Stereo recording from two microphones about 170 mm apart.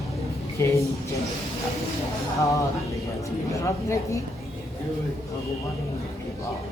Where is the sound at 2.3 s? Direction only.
20° left (ahead or behind).